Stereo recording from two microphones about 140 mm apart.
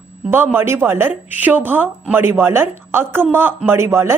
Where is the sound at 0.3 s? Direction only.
15° right (ahead or behind).